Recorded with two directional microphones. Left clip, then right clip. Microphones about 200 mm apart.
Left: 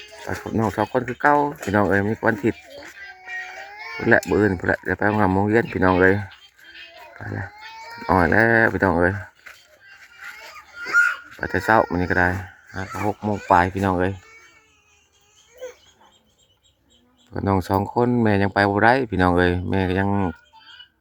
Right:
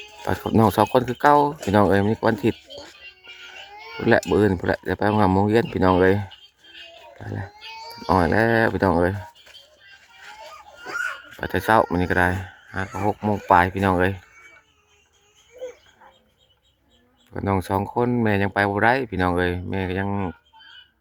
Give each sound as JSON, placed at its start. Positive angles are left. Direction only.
{"t": 0.3, "sound": "speech", "side_deg": -15}
{"t": 2.8, "sound": "music", "side_deg": 0}
{"t": 3.7, "sound": "a sound", "side_deg": -50}
{"t": 4.2, "sound": "speech", "side_deg": -5}
{"t": 11.3, "sound": "speech", "side_deg": -5}
{"t": 17.3, "sound": "speech", "side_deg": 10}